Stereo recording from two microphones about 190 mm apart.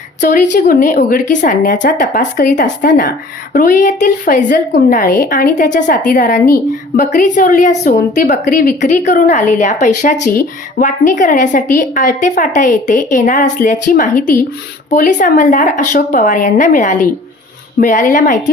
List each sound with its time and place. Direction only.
0.2 s a woman's voice: 45° left (ahead or behind)